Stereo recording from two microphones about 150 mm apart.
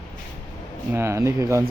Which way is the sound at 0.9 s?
15° right (ahead or behind).